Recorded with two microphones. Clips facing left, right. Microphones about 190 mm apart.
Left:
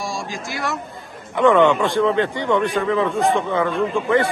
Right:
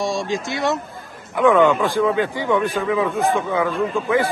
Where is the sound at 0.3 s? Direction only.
20° right (ahead or behind).